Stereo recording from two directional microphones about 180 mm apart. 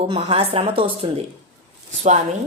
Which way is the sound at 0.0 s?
35° right (ahead or behind).